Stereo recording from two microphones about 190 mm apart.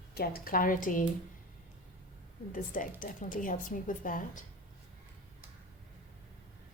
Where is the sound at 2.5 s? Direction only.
45° left (ahead or behind).